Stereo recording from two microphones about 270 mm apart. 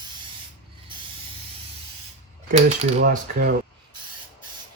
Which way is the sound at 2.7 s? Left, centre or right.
Right.